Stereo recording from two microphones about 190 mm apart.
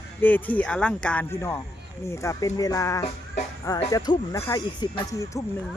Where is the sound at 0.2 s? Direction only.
10° left (ahead or behind).